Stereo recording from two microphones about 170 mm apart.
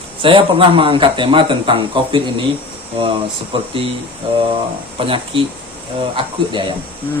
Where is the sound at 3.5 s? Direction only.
30° right (ahead or behind).